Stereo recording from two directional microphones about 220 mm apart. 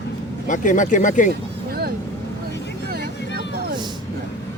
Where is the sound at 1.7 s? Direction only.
45° right (ahead or behind).